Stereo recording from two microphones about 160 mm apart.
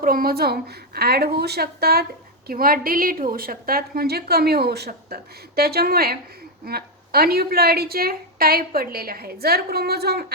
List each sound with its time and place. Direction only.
0.0 s a woman's voice: 65° right (ahead or behind)